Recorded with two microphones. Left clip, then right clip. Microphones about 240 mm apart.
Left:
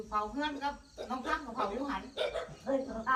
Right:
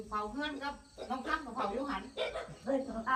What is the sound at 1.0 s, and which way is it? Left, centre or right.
Speech, left.